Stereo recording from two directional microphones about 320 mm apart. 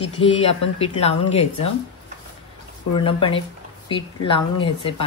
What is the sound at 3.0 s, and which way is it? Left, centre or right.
Speech, centre.